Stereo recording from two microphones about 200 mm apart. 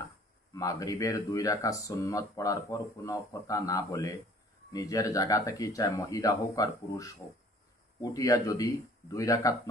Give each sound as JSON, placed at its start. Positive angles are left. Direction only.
{"t": 0.5, "sound": "speech", "side_deg": 15}